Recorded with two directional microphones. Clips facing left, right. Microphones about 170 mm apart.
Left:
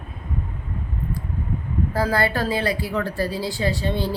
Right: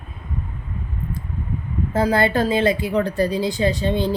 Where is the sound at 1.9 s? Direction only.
20° right (ahead or behind).